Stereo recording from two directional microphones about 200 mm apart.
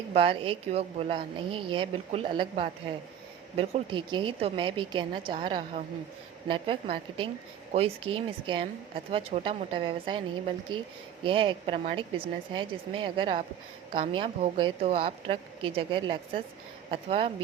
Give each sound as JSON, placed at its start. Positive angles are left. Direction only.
{"t": 0.1, "sound": "a woman's voice", "side_deg": -30}